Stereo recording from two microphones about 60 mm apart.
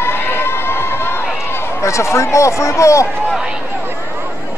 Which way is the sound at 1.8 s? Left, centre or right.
Left.